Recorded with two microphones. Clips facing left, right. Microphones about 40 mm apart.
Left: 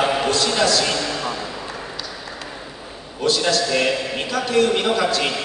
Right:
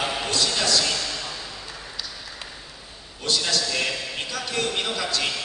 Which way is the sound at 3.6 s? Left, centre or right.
Centre.